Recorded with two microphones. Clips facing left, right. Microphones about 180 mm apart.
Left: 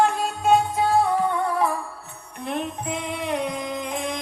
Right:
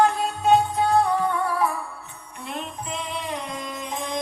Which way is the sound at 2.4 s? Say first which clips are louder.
Left 5 dB; 55° left (ahead or behind).